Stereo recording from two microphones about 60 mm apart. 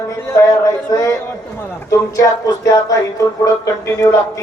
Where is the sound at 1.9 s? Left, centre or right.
Left.